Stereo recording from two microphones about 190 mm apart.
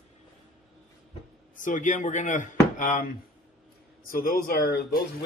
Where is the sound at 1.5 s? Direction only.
40° left (ahead or behind).